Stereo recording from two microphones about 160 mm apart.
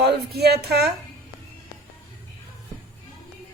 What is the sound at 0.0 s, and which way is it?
Speech, 90° right.